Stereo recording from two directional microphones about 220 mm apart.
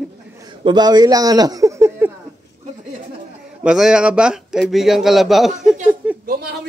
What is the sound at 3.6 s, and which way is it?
Speech, 5° right (ahead or behind).